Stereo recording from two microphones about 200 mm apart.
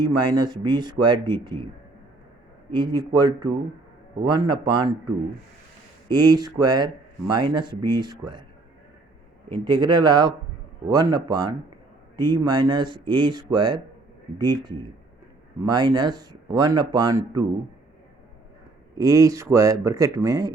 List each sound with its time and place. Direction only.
0.0 s speech: 20° right (ahead or behind)
2.7 s speech: 20° right (ahead or behind)
6.1 s speech: 20° right (ahead or behind)
9.5 s speech: 20° right (ahead or behind)
18.9 s speech: 15° right (ahead or behind)